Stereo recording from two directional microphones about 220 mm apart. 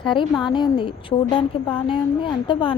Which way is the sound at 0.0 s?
20° left (ahead or behind).